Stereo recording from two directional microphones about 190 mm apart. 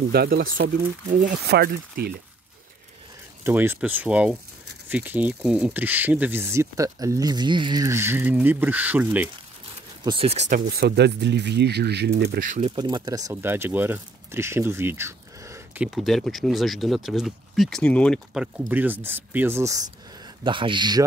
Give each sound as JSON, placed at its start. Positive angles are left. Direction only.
{"t": 0.1, "sound": "speech", "side_deg": -55}
{"t": 3.4, "sound": "speech", "side_deg": -10}
{"t": 10.0, "sound": "speech", "side_deg": -30}
{"t": 10.7, "sound": "speech", "side_deg": -55}
{"t": 12.6, "sound": "speech", "side_deg": -25}
{"t": 18.7, "sound": "speech", "side_deg": -10}